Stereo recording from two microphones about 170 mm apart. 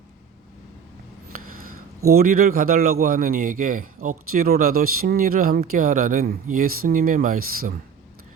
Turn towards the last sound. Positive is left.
turn(degrees=-55)  # may be behind; listen again after turning